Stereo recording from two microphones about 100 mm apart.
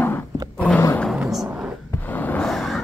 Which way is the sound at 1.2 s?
5° right (ahead or behind).